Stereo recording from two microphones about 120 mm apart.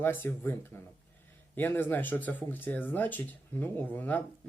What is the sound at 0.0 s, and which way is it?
Speech, 15° left (ahead or behind).